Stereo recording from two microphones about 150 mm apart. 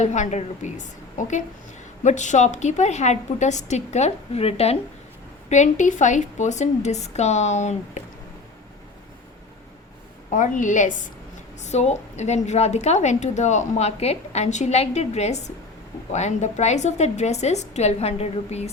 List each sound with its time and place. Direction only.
0.0 s a woman's voice: 50° left (ahead or behind)
10.3 s a woman's voice: 60° left (ahead or behind)